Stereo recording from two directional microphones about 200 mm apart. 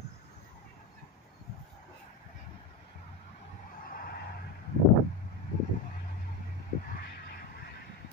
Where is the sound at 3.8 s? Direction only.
45° left (ahead or behind).